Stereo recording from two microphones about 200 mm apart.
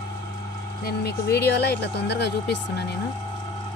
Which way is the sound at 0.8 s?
55° left (ahead or behind).